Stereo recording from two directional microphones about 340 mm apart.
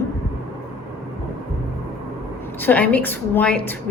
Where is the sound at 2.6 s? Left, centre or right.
Centre.